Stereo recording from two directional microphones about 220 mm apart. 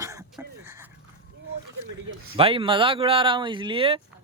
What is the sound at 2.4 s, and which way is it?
Speech, 25° right (ahead or behind).